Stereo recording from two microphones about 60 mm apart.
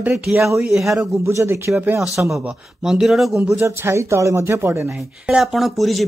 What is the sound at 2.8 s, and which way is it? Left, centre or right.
Speech, centre.